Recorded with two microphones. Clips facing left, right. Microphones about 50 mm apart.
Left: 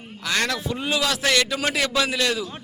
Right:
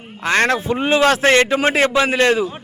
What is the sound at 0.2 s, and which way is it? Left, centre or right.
A man's voice, right.